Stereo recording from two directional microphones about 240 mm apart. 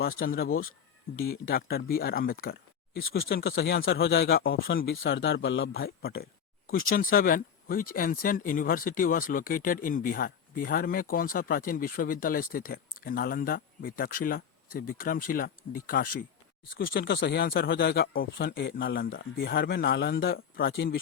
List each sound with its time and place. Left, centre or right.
0.2 s speech: left
3.2 s a man's voice: left